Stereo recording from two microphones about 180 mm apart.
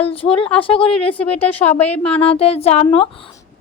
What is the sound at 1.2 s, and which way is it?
Speech, 5° left (ahead or behind).